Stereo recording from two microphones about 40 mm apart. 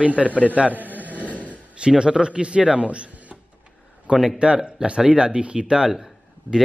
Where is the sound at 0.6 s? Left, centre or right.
Right.